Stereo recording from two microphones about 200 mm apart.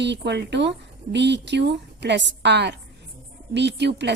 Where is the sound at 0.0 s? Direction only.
60° right (ahead or behind).